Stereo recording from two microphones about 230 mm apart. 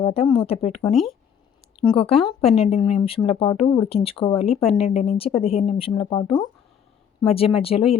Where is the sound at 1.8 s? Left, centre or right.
Left.